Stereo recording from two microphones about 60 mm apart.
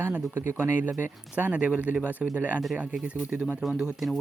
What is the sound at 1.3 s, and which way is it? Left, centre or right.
Speech, right.